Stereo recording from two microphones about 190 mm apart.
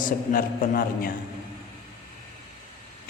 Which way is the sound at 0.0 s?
45° left (ahead or behind).